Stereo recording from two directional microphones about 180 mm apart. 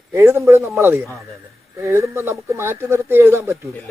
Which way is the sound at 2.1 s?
15° right (ahead or behind).